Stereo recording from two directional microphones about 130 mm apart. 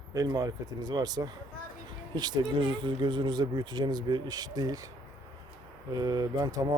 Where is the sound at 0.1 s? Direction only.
30° right (ahead or behind).